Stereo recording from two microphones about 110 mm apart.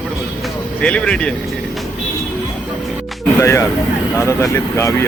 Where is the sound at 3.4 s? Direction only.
25° left (ahead or behind).